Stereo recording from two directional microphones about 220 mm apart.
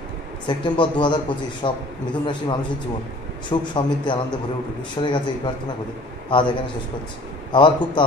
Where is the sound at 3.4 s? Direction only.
20° left (ahead or behind).